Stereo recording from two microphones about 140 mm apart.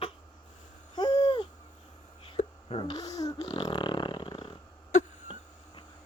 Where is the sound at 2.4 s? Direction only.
60° left (ahead or behind).